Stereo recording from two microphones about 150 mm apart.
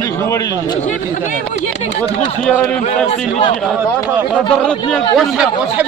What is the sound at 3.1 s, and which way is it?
Speech, 40° left (ahead or behind).